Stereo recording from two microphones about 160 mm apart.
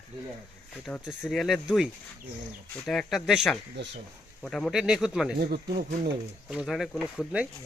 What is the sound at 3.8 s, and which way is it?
Speech, 90° right.